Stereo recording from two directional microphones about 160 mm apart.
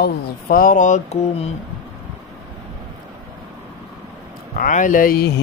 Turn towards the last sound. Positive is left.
turn(degrees=60)  # may be behind; listen again after turning